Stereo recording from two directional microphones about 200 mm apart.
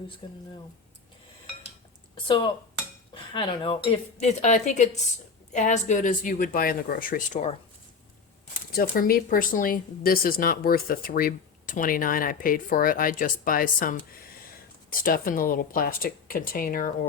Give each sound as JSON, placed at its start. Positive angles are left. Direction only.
{"t": 0.2, "sound": "speech", "side_deg": 25}
{"t": 2.1, "sound": "speech", "side_deg": 25}
{"t": 8.7, "sound": "speech", "side_deg": 45}